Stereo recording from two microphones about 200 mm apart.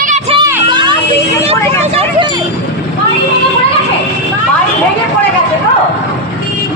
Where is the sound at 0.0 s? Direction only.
40° right (ahead or behind).